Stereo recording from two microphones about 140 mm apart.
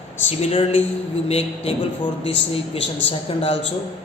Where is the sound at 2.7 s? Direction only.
45° left (ahead or behind).